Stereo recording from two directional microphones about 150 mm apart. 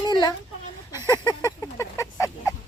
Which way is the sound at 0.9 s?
25° left (ahead or behind).